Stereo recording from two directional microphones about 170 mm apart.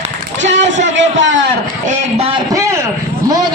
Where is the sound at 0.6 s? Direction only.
45° right (ahead or behind).